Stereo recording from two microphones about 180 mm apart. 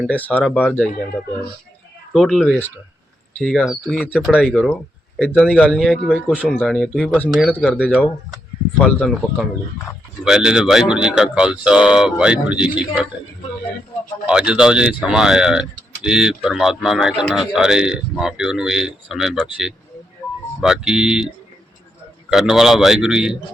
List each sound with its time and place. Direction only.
0.1 s speech: 10° left (ahead or behind)
2.1 s a man's voice: centre (ahead or behind)
14.3 s a man's voice: 5° right (ahead or behind)
22.3 s a man's voice: centre (ahead or behind)